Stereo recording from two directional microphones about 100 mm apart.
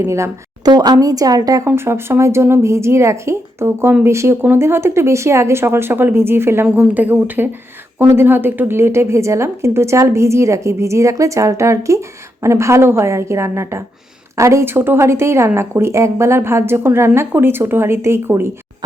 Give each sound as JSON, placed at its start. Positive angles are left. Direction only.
{"t": 0.0, "sound": "speech", "side_deg": -30}
{"t": 0.7, "sound": "a woman's voice", "side_deg": -40}
{"t": 1.6, "sound": "a woman's voice", "side_deg": -25}